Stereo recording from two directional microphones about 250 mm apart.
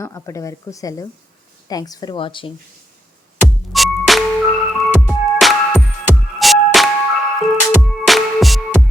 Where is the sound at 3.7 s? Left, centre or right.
Centre.